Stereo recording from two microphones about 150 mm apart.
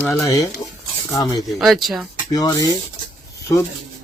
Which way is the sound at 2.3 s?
25° left (ahead or behind).